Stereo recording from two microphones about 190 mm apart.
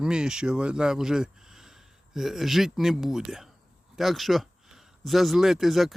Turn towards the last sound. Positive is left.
turn(degrees=0)  # may be behind; listen again after turning